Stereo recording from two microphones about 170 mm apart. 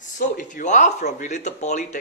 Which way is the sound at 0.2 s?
50° left (ahead or behind).